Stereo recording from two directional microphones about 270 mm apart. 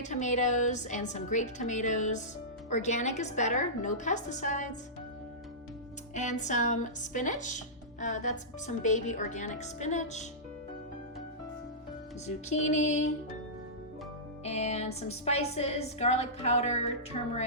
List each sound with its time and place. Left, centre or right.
0.0 s a woman's voice: left
6.1 s a woman's voice: left
12.2 s a woman's voice: left
14.4 s a woman's voice: left